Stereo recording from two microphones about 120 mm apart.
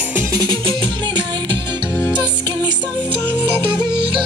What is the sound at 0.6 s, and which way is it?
Music, 40° right (ahead or behind).